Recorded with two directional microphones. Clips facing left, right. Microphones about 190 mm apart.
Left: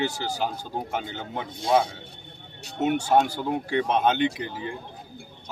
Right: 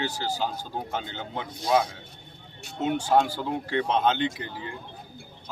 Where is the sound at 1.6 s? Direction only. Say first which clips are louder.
Left 2 dB; 25° left (ahead or behind).